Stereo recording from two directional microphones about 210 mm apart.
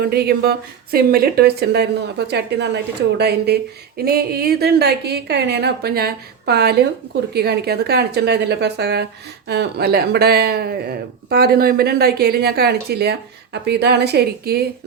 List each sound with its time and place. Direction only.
0.0 s speech: 45° right (ahead or behind)